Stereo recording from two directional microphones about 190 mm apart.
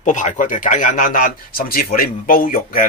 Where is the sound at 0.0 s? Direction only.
40° left (ahead or behind).